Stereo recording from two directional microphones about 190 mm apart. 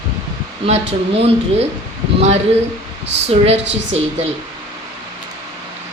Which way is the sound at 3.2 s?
35° right (ahead or behind).